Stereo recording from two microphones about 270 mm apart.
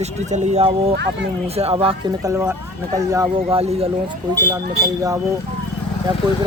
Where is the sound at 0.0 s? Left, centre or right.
Right.